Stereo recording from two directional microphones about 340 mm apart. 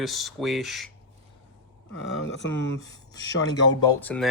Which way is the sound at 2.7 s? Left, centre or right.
Centre.